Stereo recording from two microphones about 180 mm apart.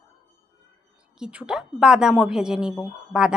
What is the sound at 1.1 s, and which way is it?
A woman's voice, 5° right (ahead or behind).